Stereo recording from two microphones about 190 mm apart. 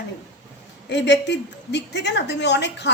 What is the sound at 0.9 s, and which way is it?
A woman's voice, 65° left (ahead or behind).